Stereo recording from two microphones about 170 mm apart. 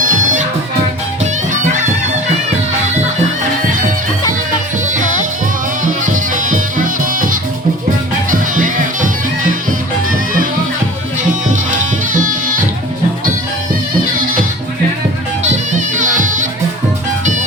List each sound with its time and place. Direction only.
0.0 s music: 50° right (ahead or behind)
3.7 s music: 50° right (ahead or behind)
4.2 s music: 20° left (ahead or behind)
5.8 s music: 50° right (ahead or behind)
10.1 s music: 55° right (ahead or behind)
12.2 s music: 50° right (ahead or behind)
15.4 s music: 45° right (ahead or behind)